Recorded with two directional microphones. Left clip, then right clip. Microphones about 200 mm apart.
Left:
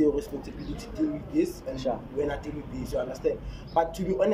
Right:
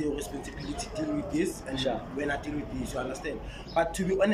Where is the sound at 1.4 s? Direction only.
35° left (ahead or behind).